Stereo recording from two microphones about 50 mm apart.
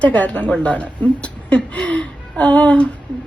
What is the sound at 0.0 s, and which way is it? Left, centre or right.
A woman's voice, left.